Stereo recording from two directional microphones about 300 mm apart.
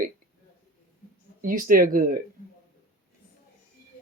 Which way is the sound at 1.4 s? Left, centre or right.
Right.